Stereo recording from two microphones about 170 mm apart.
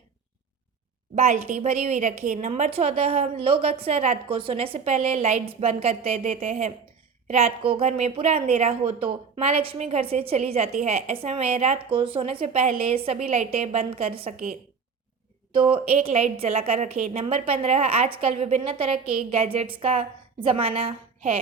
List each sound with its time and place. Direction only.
1.1 s a woman's voice: 45° right (ahead or behind)
15.5 s a woman's voice: 30° right (ahead or behind)